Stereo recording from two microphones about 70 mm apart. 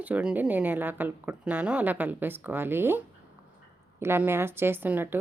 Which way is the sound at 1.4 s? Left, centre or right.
Centre.